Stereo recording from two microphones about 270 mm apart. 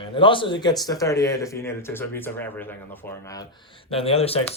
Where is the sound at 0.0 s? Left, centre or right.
Centre.